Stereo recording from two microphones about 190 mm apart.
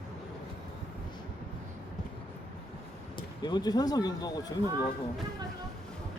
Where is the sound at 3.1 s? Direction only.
20° left (ahead or behind).